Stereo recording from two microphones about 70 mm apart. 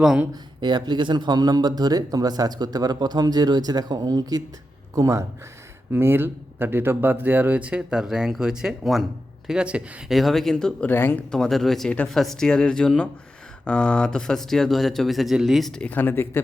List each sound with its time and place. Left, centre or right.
0.6 s speech: right
4.9 s speech: right
5.9 s speech: right; by 9.0 s centre
9.5 s speech: centre
10.1 s speech: centre
10.8 s speech: left
11.3 s speech: centre
15.9 s speech: left